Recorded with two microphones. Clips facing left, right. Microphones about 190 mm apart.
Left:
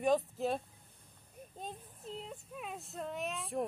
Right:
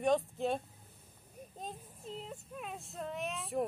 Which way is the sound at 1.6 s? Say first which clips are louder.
Even; centre (ahead or behind).